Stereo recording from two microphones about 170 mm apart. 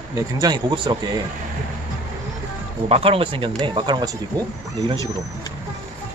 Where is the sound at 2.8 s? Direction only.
35° right (ahead or behind).